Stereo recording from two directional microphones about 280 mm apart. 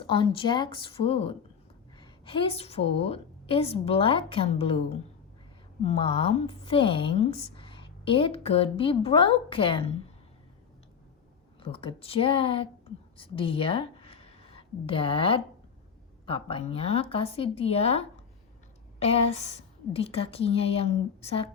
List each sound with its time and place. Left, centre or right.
0.0 s a woman's voice: centre
11.6 s a woman's voice: centre